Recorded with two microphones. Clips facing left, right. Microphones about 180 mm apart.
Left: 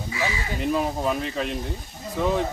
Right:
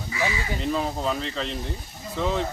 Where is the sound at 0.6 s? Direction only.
10° left (ahead or behind).